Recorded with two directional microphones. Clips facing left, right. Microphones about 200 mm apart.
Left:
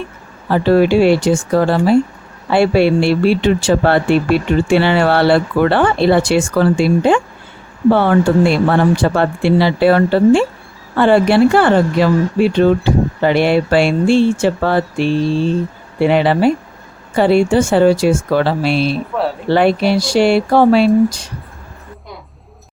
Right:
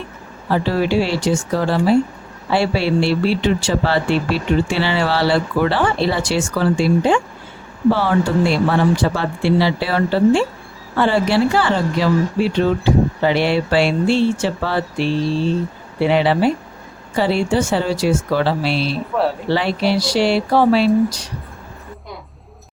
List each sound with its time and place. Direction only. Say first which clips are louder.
0.5 s speech: left 6 dB; 55° left (ahead or behind)
19.1 s speech: even; centre (ahead or behind)
19.5 s speech: left 5 dB; 55° left (ahead or behind)